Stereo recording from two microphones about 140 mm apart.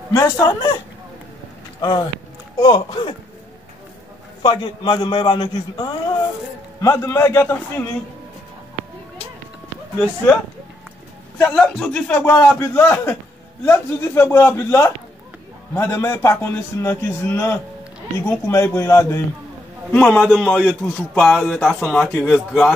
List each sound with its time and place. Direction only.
0.1 s a man's voice: 25° left (ahead or behind)
1.8 s a man's voice: 30° left (ahead or behind)
4.4 s a man's voice: 35° left (ahead or behind)
6.8 s a man's voice: 20° left (ahead or behind)
11.5 s a man's voice: 5° left (ahead or behind)
19.9 s a man's voice: 10° left (ahead or behind)